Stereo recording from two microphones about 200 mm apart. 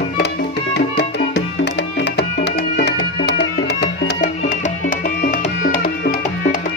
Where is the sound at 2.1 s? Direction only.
55° left (ahead or behind).